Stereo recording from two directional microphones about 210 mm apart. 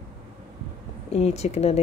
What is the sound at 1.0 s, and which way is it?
Speech, 30° left (ahead or behind).